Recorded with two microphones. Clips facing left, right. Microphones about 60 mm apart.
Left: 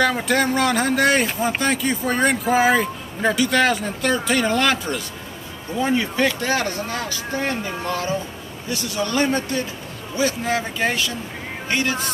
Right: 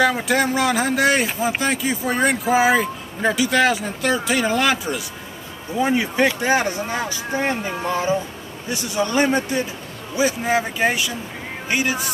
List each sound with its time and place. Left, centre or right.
0.0 s speech: centre